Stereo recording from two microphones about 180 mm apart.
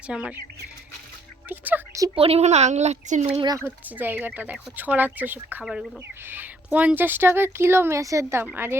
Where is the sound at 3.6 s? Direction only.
10° right (ahead or behind).